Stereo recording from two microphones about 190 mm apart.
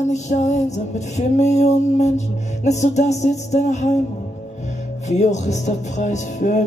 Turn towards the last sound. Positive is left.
turn(degrees=40)  # may be behind; listen again after turning